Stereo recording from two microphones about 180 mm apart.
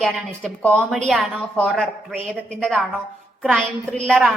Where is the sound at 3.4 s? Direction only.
Centre (ahead or behind).